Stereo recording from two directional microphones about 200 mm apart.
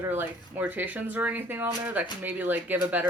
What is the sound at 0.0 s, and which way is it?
Speech, 10° right (ahead or behind).